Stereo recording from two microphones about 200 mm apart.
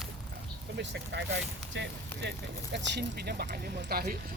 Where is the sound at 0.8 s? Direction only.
60° right (ahead or behind).